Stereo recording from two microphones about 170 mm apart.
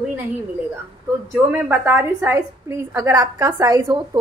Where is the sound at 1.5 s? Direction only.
15° right (ahead or behind).